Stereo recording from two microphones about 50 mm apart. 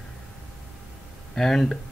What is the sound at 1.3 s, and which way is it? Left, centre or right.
Speech, centre.